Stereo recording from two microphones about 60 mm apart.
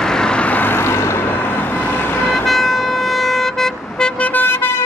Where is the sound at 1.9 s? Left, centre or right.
Left.